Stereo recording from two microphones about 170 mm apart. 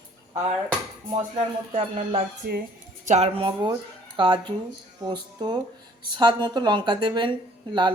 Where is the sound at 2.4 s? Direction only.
70° right (ahead or behind).